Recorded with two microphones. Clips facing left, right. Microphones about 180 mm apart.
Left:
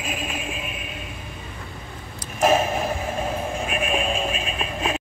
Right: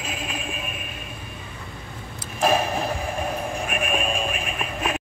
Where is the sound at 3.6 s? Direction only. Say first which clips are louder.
Left 2 dB; 25° left (ahead or behind).